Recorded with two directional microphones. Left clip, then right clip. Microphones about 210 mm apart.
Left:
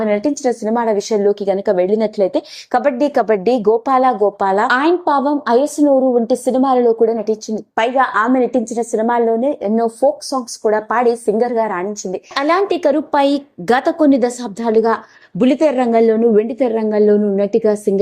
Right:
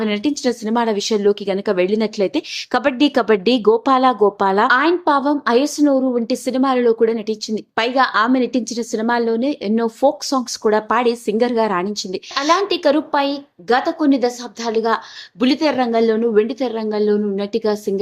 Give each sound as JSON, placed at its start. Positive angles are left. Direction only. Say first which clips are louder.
{"t": 0.0, "sound": "a woman's voice", "louder": "left 4 dB", "side_deg": -20}
{"t": 5.0, "sound": "a woman's voice", "louder": "left 1 dB", "side_deg": 0}
{"t": 7.8, "sound": "a woman's voice", "louder": "left 2 dB", "side_deg": -15}
{"t": 12.3, "sound": "a woman's voice", "louder": "left 2 dB", "side_deg": 25}
{"t": 13.2, "sound": "a woman's voice", "louder": "left 5 dB", "side_deg": 40}
{"t": 14.0, "sound": "a woman's voice", "louder": "left 4 dB", "side_deg": 25}